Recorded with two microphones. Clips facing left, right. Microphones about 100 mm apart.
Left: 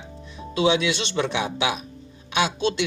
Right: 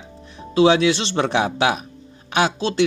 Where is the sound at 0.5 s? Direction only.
35° right (ahead or behind).